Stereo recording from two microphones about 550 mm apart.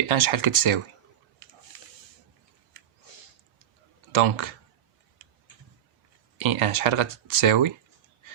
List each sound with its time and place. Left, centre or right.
0.1 s speech: right
4.1 s speech: right
6.4 s speech: right